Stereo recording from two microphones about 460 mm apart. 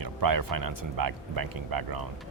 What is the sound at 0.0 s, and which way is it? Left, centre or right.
Speech, right.